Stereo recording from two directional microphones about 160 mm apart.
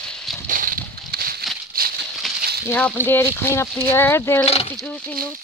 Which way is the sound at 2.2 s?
Centre (ahead or behind).